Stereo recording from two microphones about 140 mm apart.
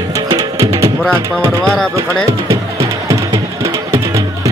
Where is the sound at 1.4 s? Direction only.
25° right (ahead or behind).